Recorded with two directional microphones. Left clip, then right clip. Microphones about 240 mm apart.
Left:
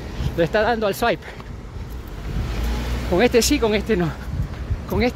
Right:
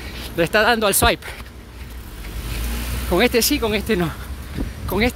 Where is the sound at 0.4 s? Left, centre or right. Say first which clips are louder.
Right 3 dB; right.